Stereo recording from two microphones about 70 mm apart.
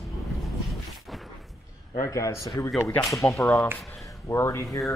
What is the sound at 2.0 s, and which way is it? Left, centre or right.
Speech, left.